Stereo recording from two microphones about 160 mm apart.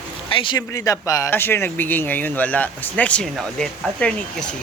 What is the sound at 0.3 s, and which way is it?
Speech, 30° left (ahead or behind).